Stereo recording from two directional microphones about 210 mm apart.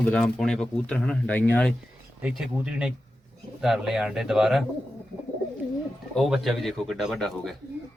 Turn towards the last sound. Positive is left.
turn(degrees=0)  # may be behind; listen again after turning